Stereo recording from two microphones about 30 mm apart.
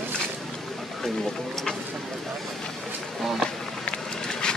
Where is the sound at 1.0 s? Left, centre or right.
Centre.